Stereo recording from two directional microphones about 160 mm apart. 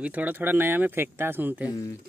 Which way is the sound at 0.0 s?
10° right (ahead or behind).